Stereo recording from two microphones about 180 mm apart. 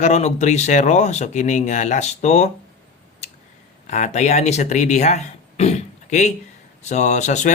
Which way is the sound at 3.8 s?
40° left (ahead or behind).